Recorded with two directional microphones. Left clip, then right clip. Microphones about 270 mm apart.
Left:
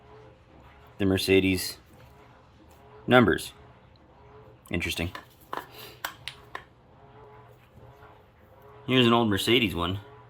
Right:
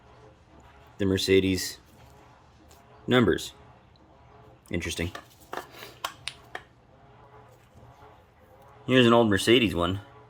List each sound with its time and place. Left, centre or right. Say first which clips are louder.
0.9 s speech: even; centre
3.1 s speech: left 3 dB; centre
4.7 s speech: left 2 dB; centre
5.7 s finger snapping: right 1 dB; centre
8.9 s speech: right 2 dB; centre